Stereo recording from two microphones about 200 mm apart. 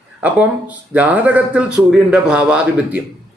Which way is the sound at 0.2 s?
5° right (ahead or behind).